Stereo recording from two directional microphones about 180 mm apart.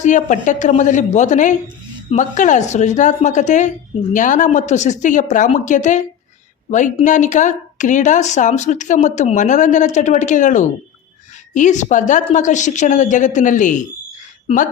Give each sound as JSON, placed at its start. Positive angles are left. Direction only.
{"t": 0.0, "sound": "a woman's voice", "side_deg": 45}